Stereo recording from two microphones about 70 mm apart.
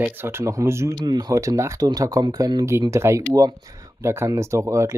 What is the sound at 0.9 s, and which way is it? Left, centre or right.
Speech, right.